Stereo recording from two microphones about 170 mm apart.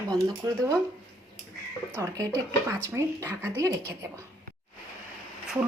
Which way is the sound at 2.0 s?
20° right (ahead or behind).